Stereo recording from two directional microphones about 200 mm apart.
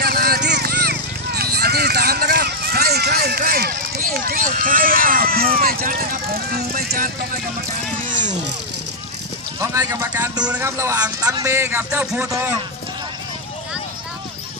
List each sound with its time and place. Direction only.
0.0 s vehicle: 50° right (ahead or behind)
8.0 s a sound: 40° right (ahead or behind)
9.6 s speech: 15° right (ahead or behind)